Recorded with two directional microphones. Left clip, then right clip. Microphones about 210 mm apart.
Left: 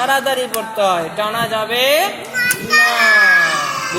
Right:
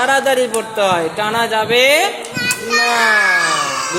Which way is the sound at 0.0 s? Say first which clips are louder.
Right 2 dB; 30° right (ahead or behind).